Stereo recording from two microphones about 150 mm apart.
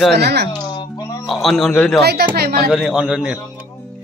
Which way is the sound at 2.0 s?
90° right.